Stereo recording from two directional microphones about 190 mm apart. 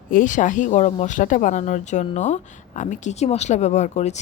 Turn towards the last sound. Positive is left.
turn(degrees=35)  # may be behind; listen again after turning